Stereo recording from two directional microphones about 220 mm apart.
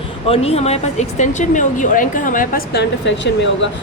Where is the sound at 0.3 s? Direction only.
25° left (ahead or behind).